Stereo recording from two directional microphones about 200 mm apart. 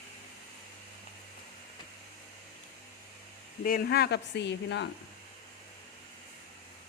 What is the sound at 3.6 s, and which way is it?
Speech, 45° left (ahead or behind).